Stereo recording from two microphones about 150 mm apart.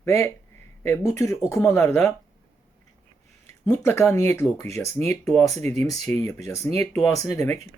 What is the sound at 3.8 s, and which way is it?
Speech, 15° left (ahead or behind).